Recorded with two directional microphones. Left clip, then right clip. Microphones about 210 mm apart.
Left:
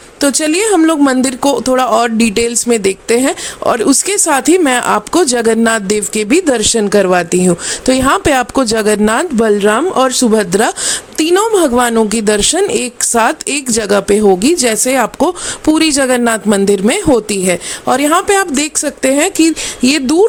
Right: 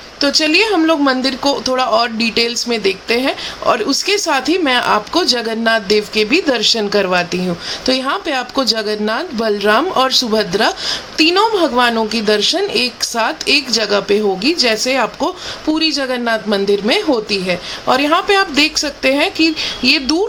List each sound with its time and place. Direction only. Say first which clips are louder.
0.2 s speech: even; 50° left (ahead or behind)
9.5 s speech: even; 30° left (ahead or behind)
10.1 s speech: left 3 dB; 45° left (ahead or behind)